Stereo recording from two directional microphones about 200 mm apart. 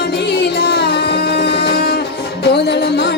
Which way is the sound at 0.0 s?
55° left (ahead or behind).